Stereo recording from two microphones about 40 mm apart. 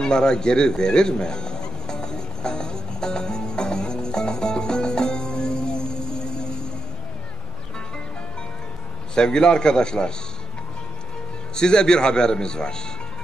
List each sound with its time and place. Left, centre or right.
0.0 s music: centre
9.1 s a man's voice: centre
11.5 s a man's voice: centre